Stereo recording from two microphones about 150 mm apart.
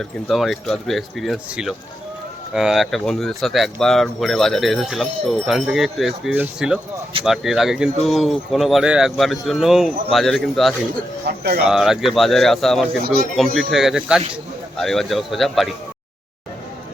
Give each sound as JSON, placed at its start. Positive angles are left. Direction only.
{"t": 0.0, "sound": "speech", "side_deg": 0}
{"t": 11.3, "sound": "speech", "side_deg": -90}
{"t": 11.7, "sound": "speech", "side_deg": -5}